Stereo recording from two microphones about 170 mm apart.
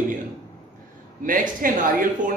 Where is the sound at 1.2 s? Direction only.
55° right (ahead or behind).